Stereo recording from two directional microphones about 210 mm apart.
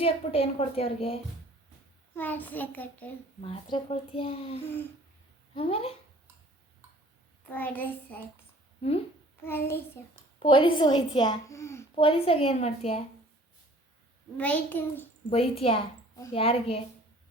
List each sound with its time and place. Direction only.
0.0 s a woman's voice: 25° left (ahead or behind)
2.1 s a child's voice: 10° left (ahead or behind)
3.4 s a woman's voice: 25° left (ahead or behind)
7.4 s a child's voice: 10° left (ahead or behind)
9.4 s a child's voice: 10° left (ahead or behind)
10.4 s a woman's voice: 25° left (ahead or behind)
11.9 s a woman's voice: 25° left (ahead or behind)
14.3 s a child's voice: 5° left (ahead or behind)
15.3 s a woman's voice: 25° left (ahead or behind)